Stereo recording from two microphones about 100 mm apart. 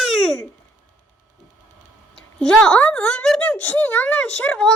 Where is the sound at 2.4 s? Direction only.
10° left (ahead or behind).